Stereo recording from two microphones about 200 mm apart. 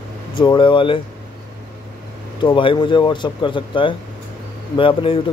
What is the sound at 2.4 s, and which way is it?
Speech, 25° left (ahead or behind).